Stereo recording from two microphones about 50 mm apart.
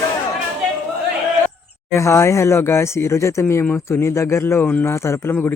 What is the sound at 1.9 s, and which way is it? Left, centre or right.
A man's voice, left.